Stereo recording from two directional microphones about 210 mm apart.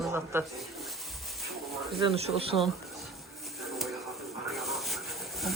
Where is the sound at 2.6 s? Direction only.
Centre (ahead or behind).